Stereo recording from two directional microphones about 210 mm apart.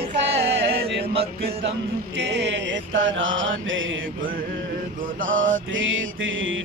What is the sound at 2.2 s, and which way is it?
Mantra, 55° right (ahead or behind).